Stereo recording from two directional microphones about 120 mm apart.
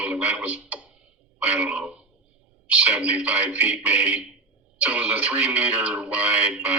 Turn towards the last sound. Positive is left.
turn(degrees=-10)  # may be behind; listen again after turning